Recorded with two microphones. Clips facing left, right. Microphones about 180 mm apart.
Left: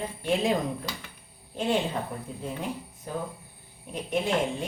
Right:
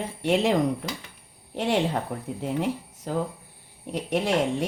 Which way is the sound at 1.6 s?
75° right (ahead or behind).